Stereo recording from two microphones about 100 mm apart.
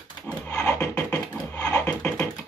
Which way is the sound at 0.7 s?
15° left (ahead or behind).